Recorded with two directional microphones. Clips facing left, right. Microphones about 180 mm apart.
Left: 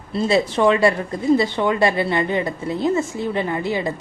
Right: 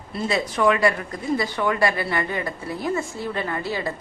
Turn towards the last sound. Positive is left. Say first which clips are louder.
# left 5 dB
turn(degrees=20)  # may be behind; listen again after turning